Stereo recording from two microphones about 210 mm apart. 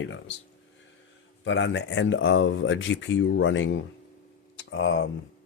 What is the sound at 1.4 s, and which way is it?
Speech, 60° left (ahead or behind).